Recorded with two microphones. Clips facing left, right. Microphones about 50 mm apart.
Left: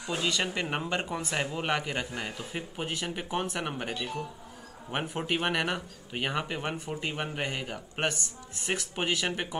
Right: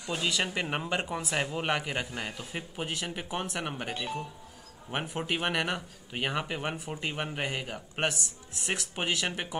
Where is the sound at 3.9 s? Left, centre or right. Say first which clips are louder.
Even; centre.